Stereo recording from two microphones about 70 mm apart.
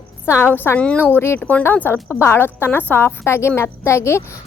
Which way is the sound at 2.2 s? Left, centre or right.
Left.